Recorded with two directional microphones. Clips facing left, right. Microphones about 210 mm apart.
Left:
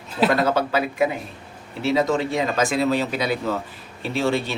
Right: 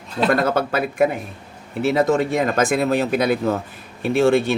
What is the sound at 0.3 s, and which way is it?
Speech, 50° right (ahead or behind).